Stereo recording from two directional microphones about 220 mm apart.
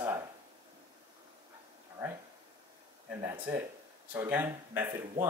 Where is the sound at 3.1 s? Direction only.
10° right (ahead or behind).